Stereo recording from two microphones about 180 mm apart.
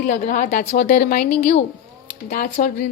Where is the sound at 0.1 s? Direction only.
45° left (ahead or behind).